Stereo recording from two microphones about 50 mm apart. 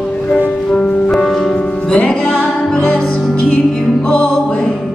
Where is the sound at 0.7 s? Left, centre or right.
Centre.